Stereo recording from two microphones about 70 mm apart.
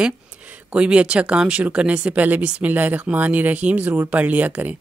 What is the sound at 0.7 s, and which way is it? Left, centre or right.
Speech, centre.